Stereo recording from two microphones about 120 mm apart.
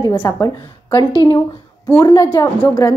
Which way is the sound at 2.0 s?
30° left (ahead or behind).